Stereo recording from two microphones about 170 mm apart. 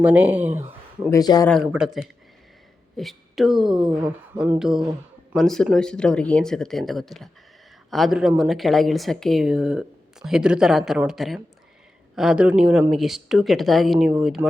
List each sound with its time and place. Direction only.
0.0 s speech: 10° right (ahead or behind)
1.1 s speech: 20° left (ahead or behind)
1.7 s a woman's voice: 5° right (ahead or behind)